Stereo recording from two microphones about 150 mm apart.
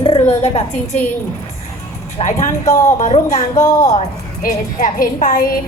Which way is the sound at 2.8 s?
55° left (ahead or behind).